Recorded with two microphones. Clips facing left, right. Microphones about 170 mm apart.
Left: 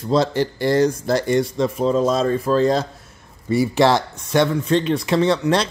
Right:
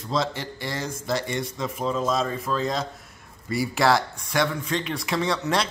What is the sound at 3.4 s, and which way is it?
Speech, 25° left (ahead or behind).